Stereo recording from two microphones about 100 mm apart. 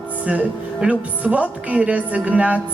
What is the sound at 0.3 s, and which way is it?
A woman's voice, 15° right (ahead or behind).